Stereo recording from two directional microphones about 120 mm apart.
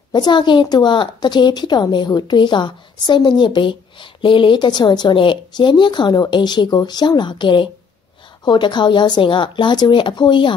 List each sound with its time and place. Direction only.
0.1 s a woman's voice: 35° left (ahead or behind)